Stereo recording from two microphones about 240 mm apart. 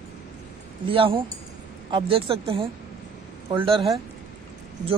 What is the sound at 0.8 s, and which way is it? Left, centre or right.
Speech, right.